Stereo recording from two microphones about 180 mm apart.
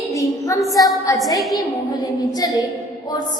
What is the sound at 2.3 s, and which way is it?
Speech, 20° left (ahead or behind).